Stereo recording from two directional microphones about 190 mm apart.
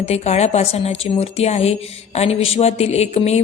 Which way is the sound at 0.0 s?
35° left (ahead or behind).